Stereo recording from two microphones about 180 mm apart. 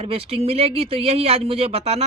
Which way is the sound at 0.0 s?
30° right (ahead or behind).